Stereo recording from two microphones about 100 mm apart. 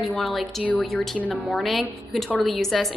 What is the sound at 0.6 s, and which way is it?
Speech, 15° left (ahead or behind).